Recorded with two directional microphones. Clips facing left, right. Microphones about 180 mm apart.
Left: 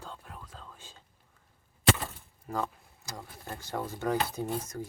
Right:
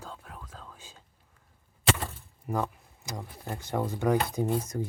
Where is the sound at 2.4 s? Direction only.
15° right (ahead or behind).